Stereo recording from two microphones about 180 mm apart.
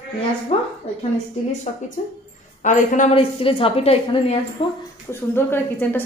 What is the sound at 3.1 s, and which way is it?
A woman's voice, 30° left (ahead or behind).